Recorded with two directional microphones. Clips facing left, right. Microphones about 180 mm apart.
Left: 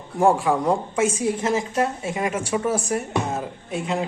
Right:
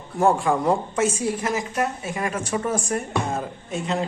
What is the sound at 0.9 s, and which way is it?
Speech, 15° left (ahead or behind).